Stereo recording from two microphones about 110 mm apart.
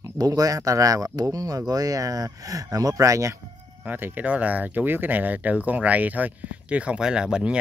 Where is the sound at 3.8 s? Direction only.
15° right (ahead or behind).